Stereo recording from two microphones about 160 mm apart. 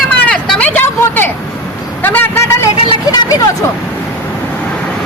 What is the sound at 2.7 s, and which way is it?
Speech, 30° left (ahead or behind).